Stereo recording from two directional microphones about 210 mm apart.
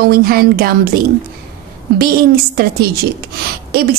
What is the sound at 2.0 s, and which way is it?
A woman's voice, 45° right (ahead or behind).